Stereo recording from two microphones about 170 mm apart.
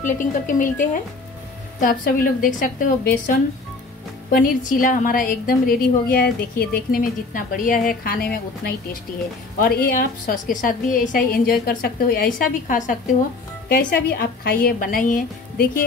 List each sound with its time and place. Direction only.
0.0 s a woman's voice: 50° left (ahead or behind)
6.9 s a woman's voice: 50° left (ahead or behind)